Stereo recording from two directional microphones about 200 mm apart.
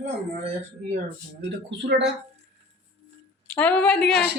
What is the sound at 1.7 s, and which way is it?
Speech, 60° right (ahead or behind).